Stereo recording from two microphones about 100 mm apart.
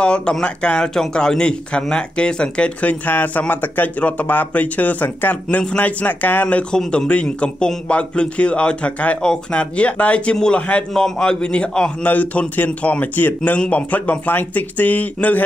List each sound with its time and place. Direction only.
0.0 s a man's voice: 10° left (ahead or behind)